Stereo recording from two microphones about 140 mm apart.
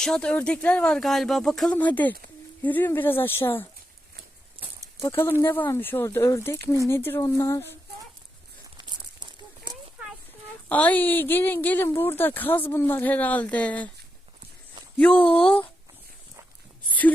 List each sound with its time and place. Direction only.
0.0 s speech: 5° left (ahead or behind)
4.6 s a sound: 40° right (ahead or behind)
4.9 s speech: 20° left (ahead or behind)
8.8 s crumpling: 30° right (ahead or behind)
10.7 s speech: 10° left (ahead or behind)
15.1 s speech: 40° left (ahead or behind)